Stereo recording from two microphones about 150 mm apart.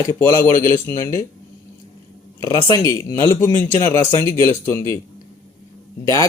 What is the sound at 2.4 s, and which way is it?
Speech, 20° left (ahead or behind).